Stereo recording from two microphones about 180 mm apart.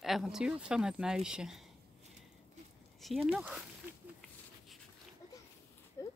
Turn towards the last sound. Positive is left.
turn(degrees=15)  # may be behind; listen again after turning